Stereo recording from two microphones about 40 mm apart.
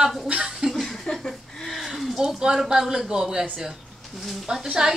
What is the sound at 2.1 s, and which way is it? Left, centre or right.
A woman's voice, centre.